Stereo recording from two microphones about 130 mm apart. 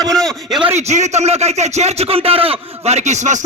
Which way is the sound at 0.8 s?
60° right (ahead or behind).